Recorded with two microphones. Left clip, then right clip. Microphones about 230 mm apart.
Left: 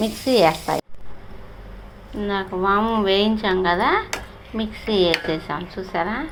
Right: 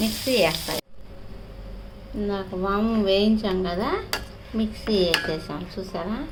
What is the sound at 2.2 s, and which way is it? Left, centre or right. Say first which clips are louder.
A woman's voice: left 6 dB; centre.